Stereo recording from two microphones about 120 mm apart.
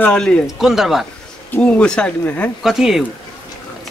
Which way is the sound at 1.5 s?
10° left (ahead or behind).